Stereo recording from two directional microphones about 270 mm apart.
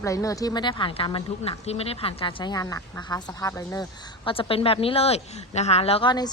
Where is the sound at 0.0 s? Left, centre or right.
Centre.